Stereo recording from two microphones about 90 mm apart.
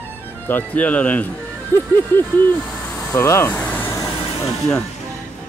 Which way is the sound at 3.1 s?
30° left (ahead or behind).